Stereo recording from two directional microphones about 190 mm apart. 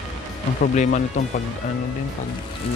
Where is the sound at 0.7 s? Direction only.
40° left (ahead or behind).